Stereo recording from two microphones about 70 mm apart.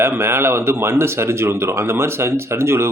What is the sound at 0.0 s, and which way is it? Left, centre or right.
Speech, right.